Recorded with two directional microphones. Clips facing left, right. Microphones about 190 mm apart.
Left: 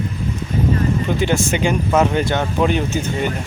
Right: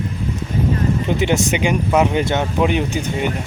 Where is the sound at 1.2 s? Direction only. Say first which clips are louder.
Right 1 dB; 20° right (ahead or behind).